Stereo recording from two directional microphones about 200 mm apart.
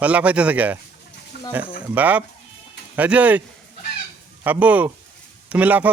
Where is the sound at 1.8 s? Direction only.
10° right (ahead or behind).